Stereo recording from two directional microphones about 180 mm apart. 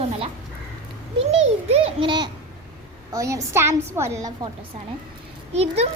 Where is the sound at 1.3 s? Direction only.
30° right (ahead or behind).